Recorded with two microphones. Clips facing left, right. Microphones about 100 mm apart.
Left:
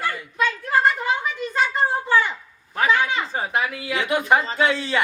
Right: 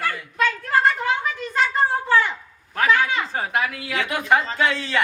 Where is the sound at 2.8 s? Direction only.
10° left (ahead or behind).